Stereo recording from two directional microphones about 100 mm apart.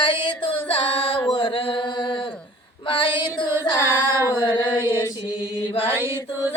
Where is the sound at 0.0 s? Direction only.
50° left (ahead or behind).